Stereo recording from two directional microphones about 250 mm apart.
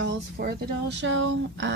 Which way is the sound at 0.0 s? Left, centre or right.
Right.